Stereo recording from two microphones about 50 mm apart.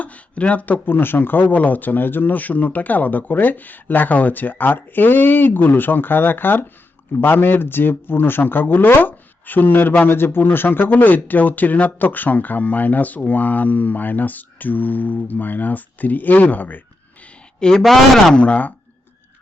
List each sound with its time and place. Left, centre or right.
0.0 s speech: left
10.2 s speech: left
17.6 s speech: centre
17.8 s speech: centre
18.3 s speech: left